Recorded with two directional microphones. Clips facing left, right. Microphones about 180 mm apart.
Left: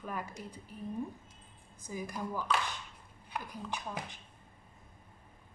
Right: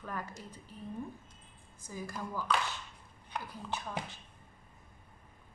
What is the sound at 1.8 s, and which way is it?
Speech, 15° left (ahead or behind).